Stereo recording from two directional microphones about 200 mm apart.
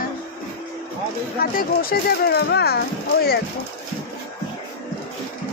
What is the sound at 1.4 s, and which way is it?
Speech, 50° left (ahead or behind).